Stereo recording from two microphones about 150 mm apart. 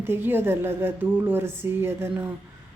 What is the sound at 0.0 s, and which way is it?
Speech, 15° right (ahead or behind).